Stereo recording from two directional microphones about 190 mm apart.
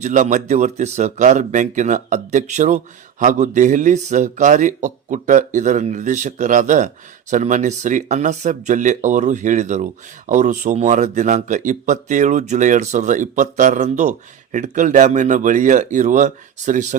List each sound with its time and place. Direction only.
0.0 s speech: 40° right (ahead or behind)